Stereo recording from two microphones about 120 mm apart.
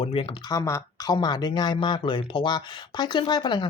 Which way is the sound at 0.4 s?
30° left (ahead or behind).